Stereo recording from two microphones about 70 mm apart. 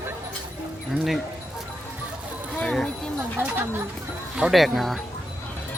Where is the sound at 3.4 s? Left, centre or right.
Right.